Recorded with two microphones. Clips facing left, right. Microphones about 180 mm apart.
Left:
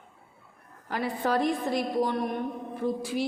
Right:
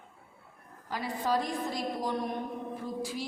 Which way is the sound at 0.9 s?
60° left (ahead or behind).